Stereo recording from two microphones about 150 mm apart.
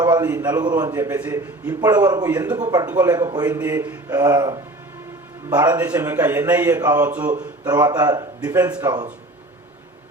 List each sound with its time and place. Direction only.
0.0 s a man's voice: 30° right (ahead or behind)
3.7 s a man's voice: 15° right (ahead or behind)
4.1 s a man's voice: 25° right (ahead or behind)
5.8 s a man's voice: 10° right (ahead or behind)
7.0 s a man's voice: 10° right (ahead or behind)
7.6 s a man's voice: 25° right (ahead or behind)